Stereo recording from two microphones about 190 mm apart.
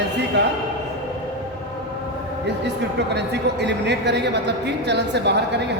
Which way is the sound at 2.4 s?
65° right (ahead or behind).